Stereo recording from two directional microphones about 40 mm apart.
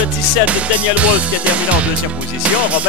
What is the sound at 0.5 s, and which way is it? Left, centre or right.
Speech, right.